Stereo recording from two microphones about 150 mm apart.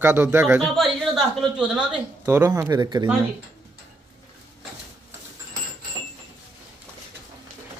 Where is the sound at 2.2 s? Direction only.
20° right (ahead or behind).